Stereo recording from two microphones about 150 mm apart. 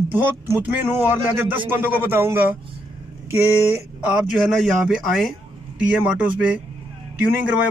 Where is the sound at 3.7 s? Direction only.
10° right (ahead or behind).